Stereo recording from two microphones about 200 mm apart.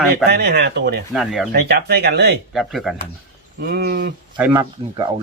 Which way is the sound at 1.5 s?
55° right (ahead or behind).